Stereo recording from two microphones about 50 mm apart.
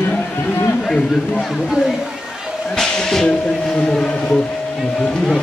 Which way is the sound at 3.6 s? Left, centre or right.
Centre.